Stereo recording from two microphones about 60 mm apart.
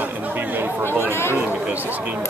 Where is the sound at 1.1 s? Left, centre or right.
Left.